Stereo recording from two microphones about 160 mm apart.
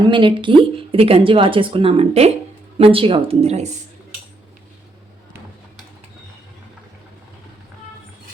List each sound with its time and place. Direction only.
0.0 s a woman's voice: 30° right (ahead or behind)